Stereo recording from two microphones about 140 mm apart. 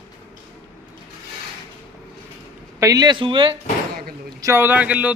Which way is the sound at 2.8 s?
25° right (ahead or behind).